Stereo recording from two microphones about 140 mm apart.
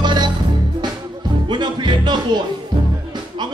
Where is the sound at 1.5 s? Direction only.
35° right (ahead or behind).